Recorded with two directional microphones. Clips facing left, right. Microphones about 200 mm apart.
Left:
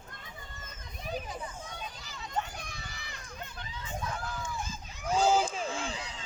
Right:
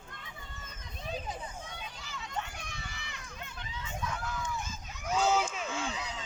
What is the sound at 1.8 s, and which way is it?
Run, 40° left (ahead or behind).